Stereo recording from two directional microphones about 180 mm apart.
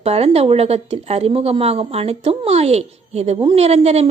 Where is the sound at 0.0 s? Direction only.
35° right (ahead or behind).